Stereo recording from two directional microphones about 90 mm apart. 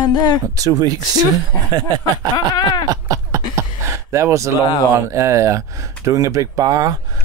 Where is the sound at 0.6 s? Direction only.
45° right (ahead or behind).